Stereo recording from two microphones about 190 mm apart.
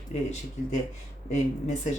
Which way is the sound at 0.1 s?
35° left (ahead or behind).